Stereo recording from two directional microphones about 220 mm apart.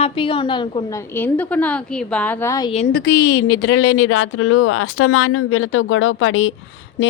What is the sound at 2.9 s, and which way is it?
Speech, 50° left (ahead or behind).